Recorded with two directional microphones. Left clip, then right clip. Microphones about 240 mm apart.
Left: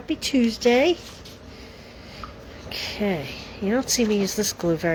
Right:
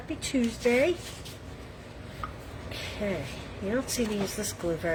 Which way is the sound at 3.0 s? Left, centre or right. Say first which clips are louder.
Left 6 dB; left.